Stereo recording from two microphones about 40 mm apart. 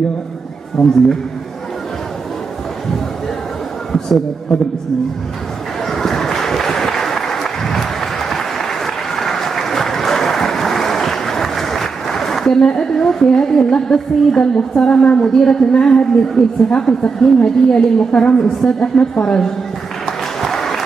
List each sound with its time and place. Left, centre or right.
0.8 s a woman's voice: centre
5.9 s applause: centre
14.4 s a woman's voice: centre
20.1 s a sound: centre